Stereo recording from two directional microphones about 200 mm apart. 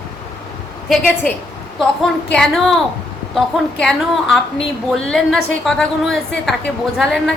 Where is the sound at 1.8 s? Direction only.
5° left (ahead or behind).